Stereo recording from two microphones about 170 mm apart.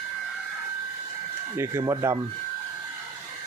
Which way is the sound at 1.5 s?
15° right (ahead or behind).